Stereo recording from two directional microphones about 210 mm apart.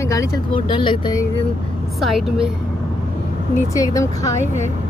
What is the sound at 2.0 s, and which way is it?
Speech, centre (ahead or behind).